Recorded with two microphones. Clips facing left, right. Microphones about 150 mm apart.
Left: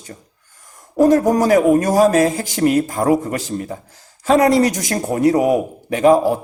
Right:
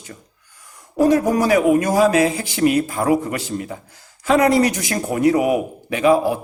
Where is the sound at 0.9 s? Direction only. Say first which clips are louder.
Left 3 dB; 45° left (ahead or behind).